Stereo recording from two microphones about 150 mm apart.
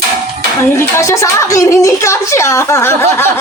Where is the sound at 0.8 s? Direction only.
20° left (ahead or behind).